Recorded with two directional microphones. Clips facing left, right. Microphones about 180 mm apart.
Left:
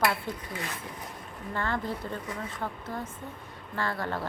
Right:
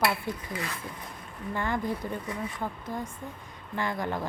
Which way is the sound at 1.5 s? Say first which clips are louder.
Right 1 dB; 15° right (ahead or behind).